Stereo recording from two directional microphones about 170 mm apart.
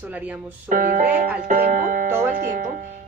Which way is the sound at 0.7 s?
50° right (ahead or behind).